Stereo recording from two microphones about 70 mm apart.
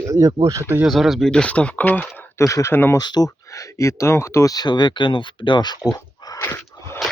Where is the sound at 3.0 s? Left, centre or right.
Left.